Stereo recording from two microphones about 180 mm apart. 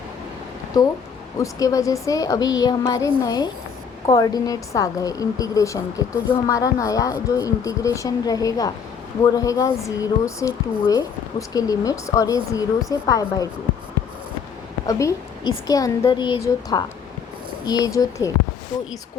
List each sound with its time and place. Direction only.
0.7 s a woman's voice: 20° left (ahead or behind)
14.8 s a woman's voice: 20° left (ahead or behind)